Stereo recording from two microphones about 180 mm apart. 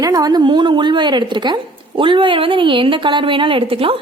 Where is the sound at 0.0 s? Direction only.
20° right (ahead or behind).